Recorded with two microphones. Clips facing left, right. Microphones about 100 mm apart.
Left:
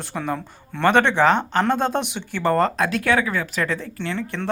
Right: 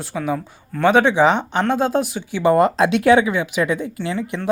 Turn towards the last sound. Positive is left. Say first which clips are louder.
# right 3 dB
turn(degrees=-15)  # may be behind; listen again after turning